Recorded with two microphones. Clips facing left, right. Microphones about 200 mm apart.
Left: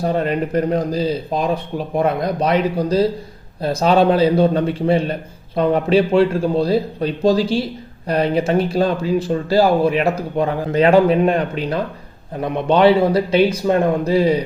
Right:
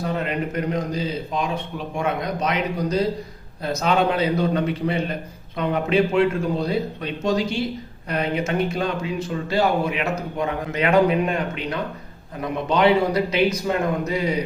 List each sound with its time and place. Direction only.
0.0 s speech: 35° left (ahead or behind)